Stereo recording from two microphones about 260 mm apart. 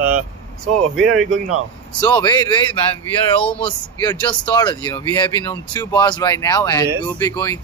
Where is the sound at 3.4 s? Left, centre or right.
Centre.